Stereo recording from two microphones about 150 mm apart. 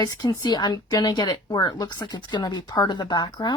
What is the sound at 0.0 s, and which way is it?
Speech, 25° left (ahead or behind).